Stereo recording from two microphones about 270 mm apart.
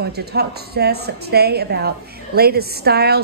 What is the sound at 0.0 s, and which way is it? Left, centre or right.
A woman's voice, right.